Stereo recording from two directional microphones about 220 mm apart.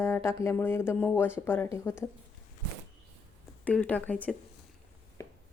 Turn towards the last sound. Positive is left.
turn(degrees=15)  # may be behind; listen again after turning